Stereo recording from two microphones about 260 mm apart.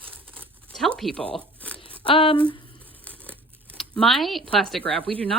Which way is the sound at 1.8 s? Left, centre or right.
Centre.